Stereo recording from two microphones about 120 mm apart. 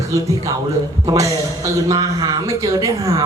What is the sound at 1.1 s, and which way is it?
A man's voice, 30° right (ahead or behind).